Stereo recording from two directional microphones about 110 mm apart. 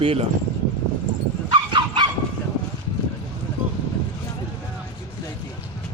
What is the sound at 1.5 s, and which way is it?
Dog, 45° right (ahead or behind).